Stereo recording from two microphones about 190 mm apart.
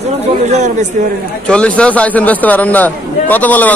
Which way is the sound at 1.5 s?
5° left (ahead or behind).